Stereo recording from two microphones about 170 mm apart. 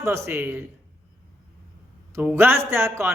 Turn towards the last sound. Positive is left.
turn(degrees=-15)  # may be behind; listen again after turning